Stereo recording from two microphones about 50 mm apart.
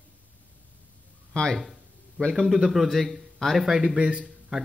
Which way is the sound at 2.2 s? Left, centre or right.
Right.